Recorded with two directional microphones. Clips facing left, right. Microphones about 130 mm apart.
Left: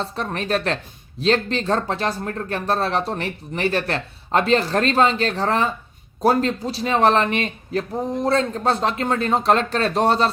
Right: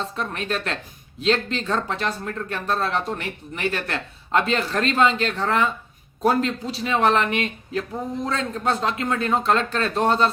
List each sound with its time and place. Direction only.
0.0 s speech: 35° left (ahead or behind)